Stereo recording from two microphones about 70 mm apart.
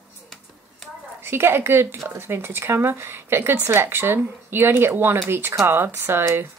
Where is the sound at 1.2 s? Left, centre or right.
Right.